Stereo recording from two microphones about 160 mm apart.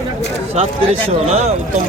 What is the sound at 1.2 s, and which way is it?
Speech, 45° right (ahead or behind).